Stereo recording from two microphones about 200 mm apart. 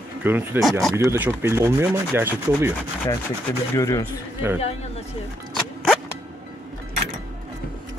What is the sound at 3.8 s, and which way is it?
Speech, 15° left (ahead or behind).